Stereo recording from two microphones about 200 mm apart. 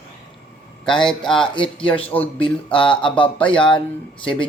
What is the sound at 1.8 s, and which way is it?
Speech, 5° left (ahead or behind).